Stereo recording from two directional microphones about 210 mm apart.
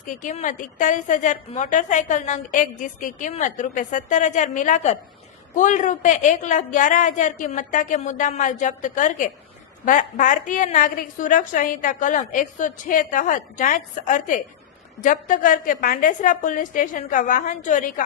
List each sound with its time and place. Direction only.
0.0 s a woman's voice: 40° left (ahead or behind)